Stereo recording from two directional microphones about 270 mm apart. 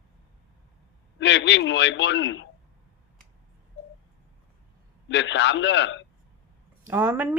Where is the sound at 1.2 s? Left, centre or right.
Left.